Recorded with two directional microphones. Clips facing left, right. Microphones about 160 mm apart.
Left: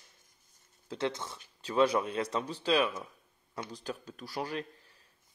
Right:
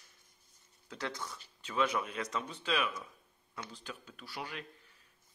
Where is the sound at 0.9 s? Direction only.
25° left (ahead or behind).